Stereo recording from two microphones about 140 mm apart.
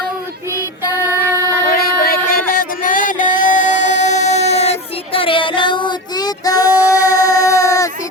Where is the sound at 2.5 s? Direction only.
80° left; by 4.7 s 50° left (ahead or behind).